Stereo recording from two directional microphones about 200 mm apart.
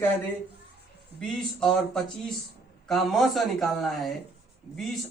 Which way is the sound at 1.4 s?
Centre (ahead or behind).